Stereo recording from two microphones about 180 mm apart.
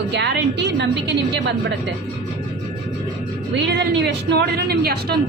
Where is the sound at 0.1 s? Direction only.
70° right (ahead or behind).